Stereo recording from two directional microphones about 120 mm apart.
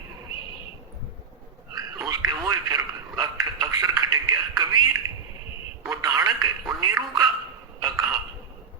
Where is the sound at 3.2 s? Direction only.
30° right (ahead or behind).